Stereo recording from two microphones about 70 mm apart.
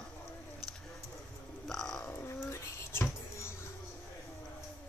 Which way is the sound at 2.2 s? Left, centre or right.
Left.